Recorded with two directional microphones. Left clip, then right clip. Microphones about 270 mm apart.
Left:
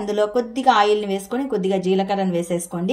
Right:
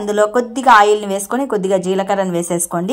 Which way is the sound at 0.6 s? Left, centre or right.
Right.